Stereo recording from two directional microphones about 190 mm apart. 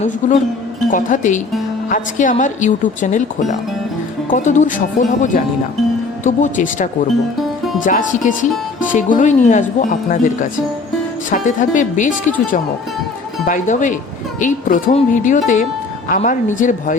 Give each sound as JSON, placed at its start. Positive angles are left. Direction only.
{"t": 0.2, "sound": "speech", "side_deg": 40}
{"t": 7.9, "sound": "speech", "side_deg": 45}